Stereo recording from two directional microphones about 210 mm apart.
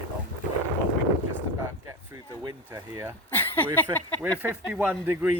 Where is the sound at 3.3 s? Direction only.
10° left (ahead or behind).